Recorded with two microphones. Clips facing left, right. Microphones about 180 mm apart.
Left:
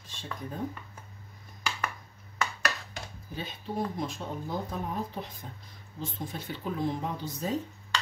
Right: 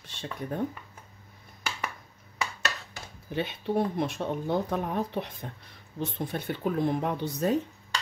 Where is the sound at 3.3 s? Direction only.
65° right (ahead or behind).